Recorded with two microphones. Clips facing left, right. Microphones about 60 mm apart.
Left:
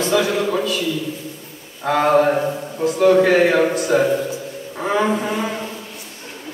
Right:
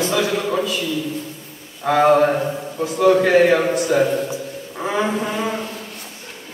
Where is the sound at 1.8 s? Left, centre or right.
Centre.